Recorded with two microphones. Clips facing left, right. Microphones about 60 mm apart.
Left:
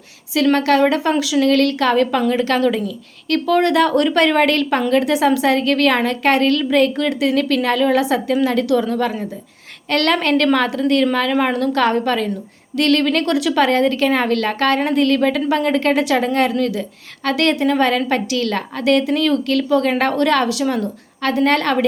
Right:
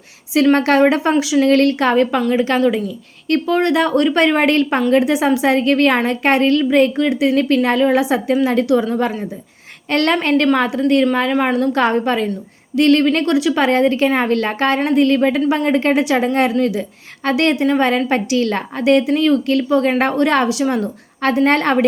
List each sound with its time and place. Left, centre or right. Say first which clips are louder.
0.5 s a woman's voice: right 1 dB; right
1.5 s a woman's voice: right 1 dB; right; by 13.7 s centre
13.7 s a woman's voice: right 1 dB; centre
17.9 s a woman's voice: right 2 dB; right